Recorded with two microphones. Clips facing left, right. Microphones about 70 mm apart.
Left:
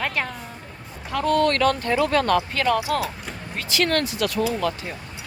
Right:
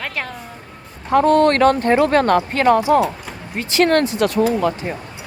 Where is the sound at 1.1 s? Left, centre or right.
Right.